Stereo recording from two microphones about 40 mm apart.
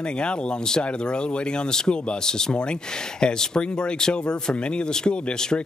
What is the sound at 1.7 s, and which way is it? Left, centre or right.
Speech, centre.